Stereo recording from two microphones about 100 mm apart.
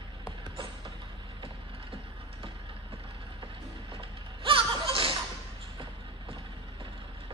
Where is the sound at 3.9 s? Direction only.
60° right (ahead or behind).